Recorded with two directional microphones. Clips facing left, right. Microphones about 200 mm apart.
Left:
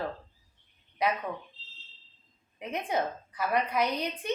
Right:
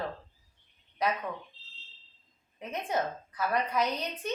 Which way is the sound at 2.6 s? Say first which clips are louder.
Left 1 dB; 10° left (ahead or behind).